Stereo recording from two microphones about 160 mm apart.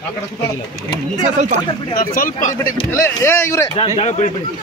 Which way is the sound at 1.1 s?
45° right (ahead or behind).